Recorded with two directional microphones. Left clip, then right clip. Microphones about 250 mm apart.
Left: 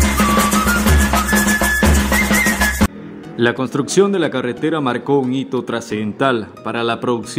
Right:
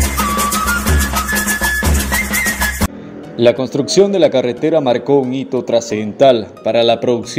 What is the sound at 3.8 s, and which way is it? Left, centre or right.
Speech, left.